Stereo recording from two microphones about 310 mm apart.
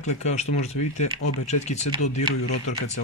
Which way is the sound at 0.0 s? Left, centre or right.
Left.